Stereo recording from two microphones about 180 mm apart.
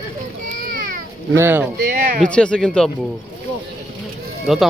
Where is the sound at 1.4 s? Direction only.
10° right (ahead or behind).